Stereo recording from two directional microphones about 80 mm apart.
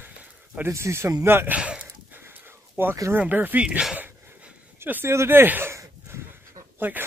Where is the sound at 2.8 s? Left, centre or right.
Right; by 4.1 s centre.